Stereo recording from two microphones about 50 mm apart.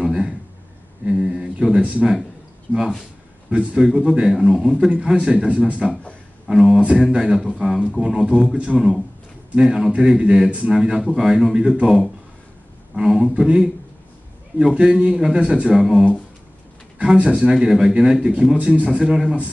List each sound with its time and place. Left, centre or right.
0.0 s a sound: centre
1.0 s speech: centre
3.4 s a man's voice: centre
6.4 s a man's voice: centre
8.0 s a man's voice: centre
12.9 s a man's voice: centre
15.7 s a man's voice: centre
17.0 s a man's voice: right
17.6 s a man's voice: centre